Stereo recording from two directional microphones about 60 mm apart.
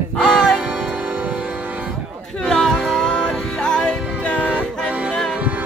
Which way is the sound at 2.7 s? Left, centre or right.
Centre.